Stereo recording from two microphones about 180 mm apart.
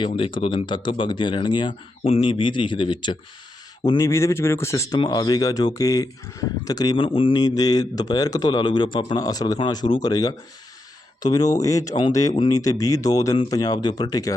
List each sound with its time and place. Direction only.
0.2 s speech: 30° left (ahead or behind)